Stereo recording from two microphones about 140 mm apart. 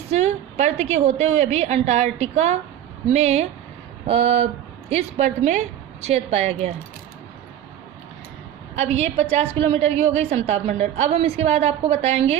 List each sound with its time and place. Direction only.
0.1 s a woman's voice: 50° right (ahead or behind)
8.7 s a woman's voice: 50° right (ahead or behind)